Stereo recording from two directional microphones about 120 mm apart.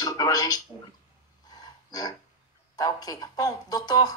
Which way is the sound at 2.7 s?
30° left (ahead or behind).